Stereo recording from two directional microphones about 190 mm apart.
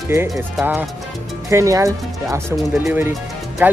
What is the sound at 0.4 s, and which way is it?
Speech, 10° right (ahead or behind).